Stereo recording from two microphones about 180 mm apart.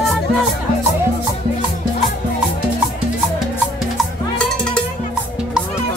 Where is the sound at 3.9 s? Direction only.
5° left (ahead or behind).